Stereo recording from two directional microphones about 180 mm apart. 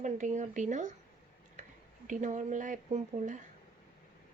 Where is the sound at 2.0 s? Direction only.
45° right (ahead or behind).